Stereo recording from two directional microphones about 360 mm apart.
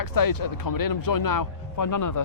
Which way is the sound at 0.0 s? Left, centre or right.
Left.